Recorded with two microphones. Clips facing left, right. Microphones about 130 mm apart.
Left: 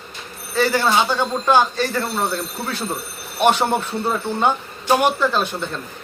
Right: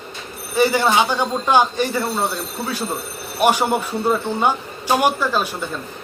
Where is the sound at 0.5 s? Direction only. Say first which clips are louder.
Right 2 dB; 15° right (ahead or behind).